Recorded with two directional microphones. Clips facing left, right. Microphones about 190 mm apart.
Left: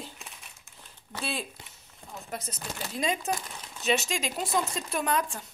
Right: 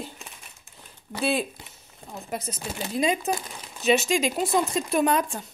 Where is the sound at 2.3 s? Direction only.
5° right (ahead or behind).